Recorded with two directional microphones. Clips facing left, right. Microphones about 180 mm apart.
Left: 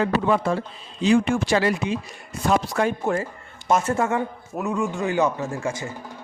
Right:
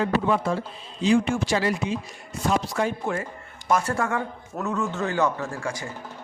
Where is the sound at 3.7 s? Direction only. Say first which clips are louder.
Left 3 dB; 20° left (ahead or behind).